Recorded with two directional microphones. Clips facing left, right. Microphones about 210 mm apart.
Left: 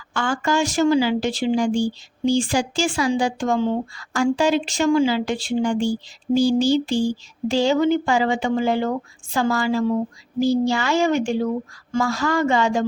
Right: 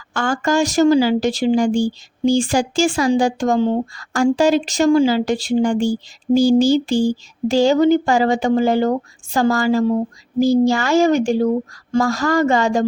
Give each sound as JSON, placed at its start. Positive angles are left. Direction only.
{"t": 0.1, "sound": "speech", "side_deg": -45}